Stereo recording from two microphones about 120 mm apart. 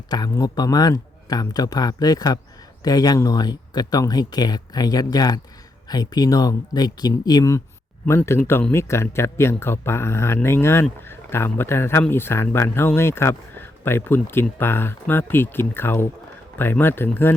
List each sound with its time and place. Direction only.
0.1 s speech: 35° left (ahead or behind); by 17.1 s 20° left (ahead or behind)